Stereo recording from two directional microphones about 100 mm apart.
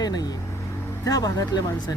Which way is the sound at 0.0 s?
40° left (ahead or behind).